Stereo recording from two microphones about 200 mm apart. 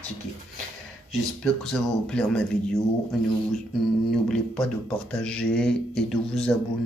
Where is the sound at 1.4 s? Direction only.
Centre (ahead or behind).